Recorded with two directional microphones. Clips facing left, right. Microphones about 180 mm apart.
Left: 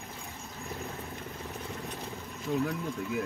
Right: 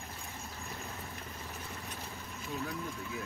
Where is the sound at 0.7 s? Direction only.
15° left (ahead or behind).